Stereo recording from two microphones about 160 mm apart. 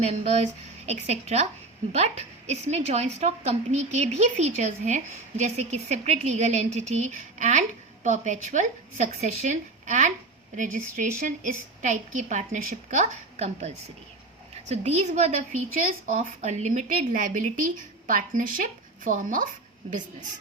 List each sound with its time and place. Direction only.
0.0 s a woman's voice: 45° right (ahead or behind)